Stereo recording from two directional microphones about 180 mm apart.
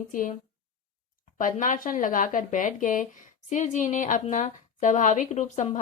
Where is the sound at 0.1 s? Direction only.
45° left (ahead or behind).